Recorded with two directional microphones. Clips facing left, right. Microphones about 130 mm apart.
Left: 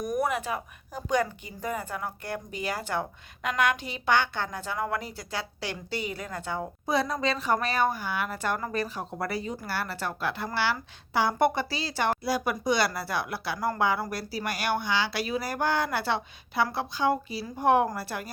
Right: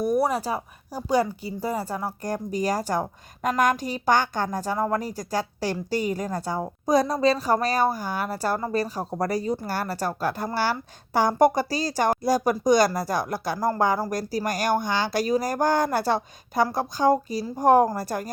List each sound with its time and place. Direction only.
0.0 s a woman's voice: 30° right (ahead or behind)